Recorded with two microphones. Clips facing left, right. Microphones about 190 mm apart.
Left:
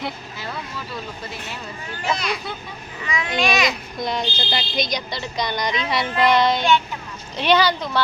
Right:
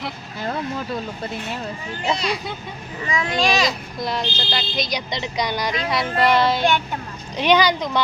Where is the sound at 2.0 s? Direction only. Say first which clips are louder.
Right 1 dB; 35° right (ahead or behind).